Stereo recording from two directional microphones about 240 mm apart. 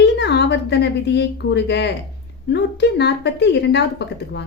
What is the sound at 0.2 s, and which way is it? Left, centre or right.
A woman's voice, left.